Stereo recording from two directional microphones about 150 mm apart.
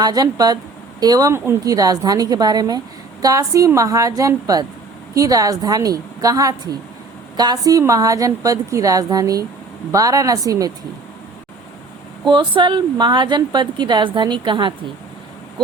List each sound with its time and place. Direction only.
0.0 s speech: 25° right (ahead or behind)
12.2 s speech: 30° right (ahead or behind)